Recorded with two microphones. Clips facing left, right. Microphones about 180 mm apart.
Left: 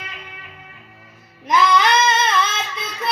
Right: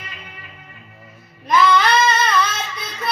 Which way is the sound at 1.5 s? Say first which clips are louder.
Right 1 dB; 20° left (ahead or behind).